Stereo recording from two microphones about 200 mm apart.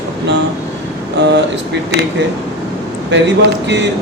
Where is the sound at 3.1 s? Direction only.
65° right (ahead or behind).